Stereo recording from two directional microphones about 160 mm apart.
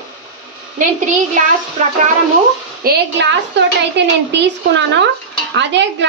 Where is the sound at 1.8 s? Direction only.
50° right (ahead or behind).